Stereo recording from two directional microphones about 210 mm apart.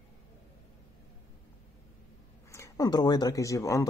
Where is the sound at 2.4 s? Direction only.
15° left (ahead or behind).